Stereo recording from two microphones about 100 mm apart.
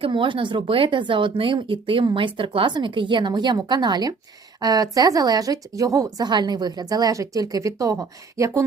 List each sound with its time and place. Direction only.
0.0 s a woman's voice: 55° right (ahead or behind); by 8.6 s 30° right (ahead or behind)